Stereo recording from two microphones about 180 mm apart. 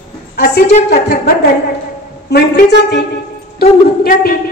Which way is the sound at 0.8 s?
60° left (ahead or behind).